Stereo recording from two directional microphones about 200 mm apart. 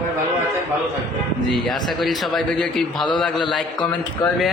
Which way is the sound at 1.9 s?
Centre (ahead or behind).